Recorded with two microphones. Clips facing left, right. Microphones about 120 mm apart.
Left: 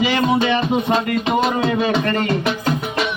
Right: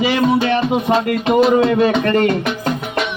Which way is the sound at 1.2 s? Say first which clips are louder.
Right 9 dB; 50° right (ahead or behind).